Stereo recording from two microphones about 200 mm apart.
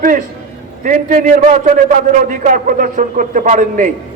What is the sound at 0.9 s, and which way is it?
A man's voice, 40° right (ahead or behind).